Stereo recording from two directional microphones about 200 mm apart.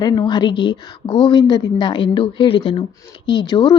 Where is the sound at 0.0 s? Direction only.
20° left (ahead or behind).